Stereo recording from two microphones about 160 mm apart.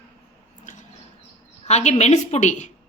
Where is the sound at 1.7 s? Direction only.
45° left (ahead or behind).